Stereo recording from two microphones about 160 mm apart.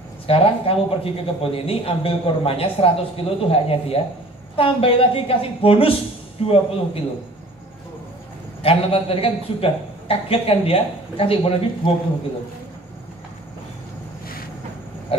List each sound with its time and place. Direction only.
0.3 s a man's voice: 35° left (ahead or behind)
8.6 s a man's voice: 35° left (ahead or behind)